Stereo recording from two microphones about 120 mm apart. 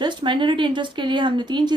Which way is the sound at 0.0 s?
40° right (ahead or behind).